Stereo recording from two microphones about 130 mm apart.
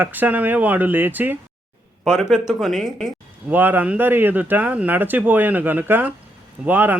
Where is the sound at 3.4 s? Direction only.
15° right (ahead or behind).